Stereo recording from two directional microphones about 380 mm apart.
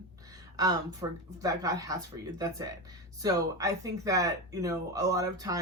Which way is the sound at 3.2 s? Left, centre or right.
Centre.